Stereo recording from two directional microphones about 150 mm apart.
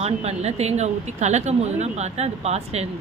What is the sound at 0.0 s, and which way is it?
A woman's voice, 45° right (ahead or behind).